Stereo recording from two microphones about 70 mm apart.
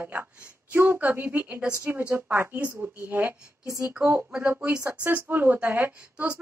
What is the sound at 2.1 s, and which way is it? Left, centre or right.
A woman's voice, right.